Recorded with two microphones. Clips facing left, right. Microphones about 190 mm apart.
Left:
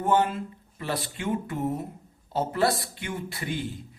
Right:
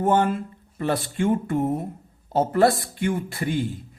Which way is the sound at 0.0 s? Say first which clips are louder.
Right 3 dB; 50° right (ahead or behind).